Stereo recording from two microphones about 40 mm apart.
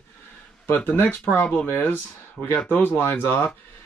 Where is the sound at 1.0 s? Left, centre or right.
Left.